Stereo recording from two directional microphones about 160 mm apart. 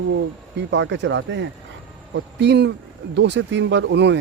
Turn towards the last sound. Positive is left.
turn(degrees=-90)